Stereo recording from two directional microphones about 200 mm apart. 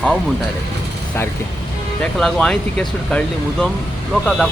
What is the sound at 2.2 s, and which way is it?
Speech, 5° left (ahead or behind).